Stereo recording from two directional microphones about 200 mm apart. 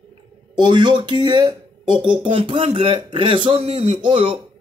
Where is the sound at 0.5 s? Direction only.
25° right (ahead or behind).